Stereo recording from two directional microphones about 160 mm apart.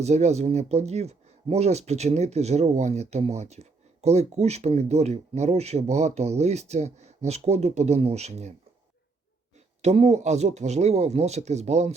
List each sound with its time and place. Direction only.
0.0 s speech: 45° right (ahead or behind)
9.8 s speech: 45° right (ahead or behind)